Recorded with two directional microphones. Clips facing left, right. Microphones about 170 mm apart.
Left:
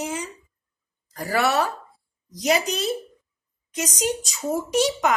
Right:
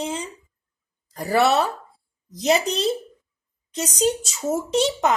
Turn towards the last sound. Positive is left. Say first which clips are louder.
# right 1 dB
turn(degrees=-20)  # may be behind; listen again after turning